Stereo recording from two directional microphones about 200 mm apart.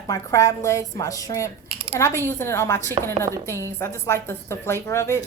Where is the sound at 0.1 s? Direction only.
15° left (ahead or behind).